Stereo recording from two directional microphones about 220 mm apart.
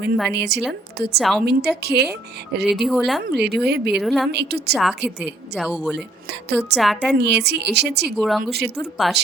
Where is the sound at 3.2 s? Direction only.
45° right (ahead or behind).